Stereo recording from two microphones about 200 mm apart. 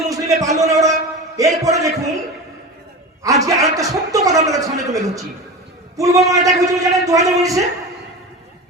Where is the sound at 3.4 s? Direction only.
15° right (ahead or behind).